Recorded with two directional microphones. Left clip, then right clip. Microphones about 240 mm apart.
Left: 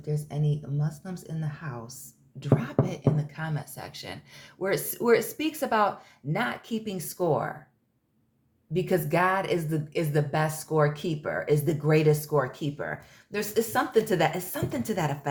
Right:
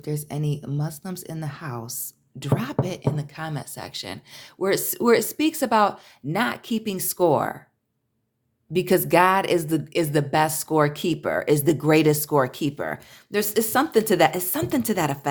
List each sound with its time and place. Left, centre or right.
0.0 s a woman's voice: right
8.7 s a woman's voice: right